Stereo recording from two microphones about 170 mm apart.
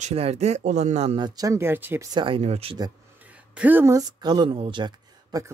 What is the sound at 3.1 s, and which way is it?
Speech, 10° right (ahead or behind).